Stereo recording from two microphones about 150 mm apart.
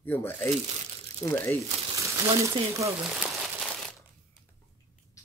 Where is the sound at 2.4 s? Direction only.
20° right (ahead or behind).